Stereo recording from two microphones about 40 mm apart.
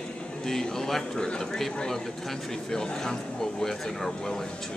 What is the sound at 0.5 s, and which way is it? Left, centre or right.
Speech, centre.